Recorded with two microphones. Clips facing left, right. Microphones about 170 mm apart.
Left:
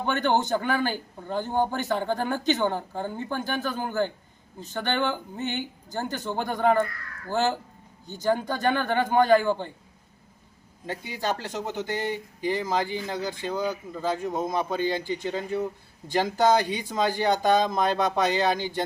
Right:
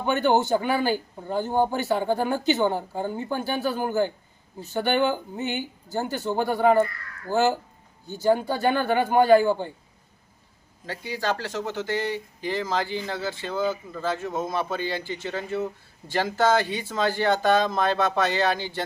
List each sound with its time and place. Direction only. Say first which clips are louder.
0.0 s speech: right 3 dB; 15° right (ahead or behind)
10.8 s speech: right 1 dB; 20° left (ahead or behind)